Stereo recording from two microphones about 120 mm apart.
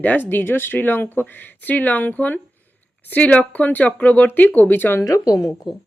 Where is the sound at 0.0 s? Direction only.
15° left (ahead or behind).